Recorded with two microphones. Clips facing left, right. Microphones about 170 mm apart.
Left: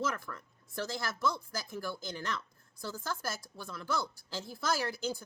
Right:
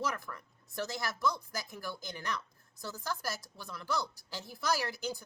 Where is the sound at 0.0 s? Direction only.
15° right (ahead or behind).